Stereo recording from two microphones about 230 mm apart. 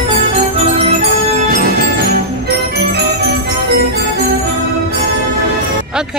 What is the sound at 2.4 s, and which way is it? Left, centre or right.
Music, right.